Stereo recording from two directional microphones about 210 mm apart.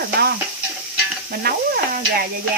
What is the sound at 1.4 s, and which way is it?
Speech, 45° right (ahead or behind).